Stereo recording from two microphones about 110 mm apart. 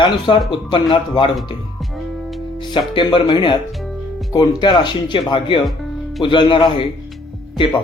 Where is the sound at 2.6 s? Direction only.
45° left (ahead or behind).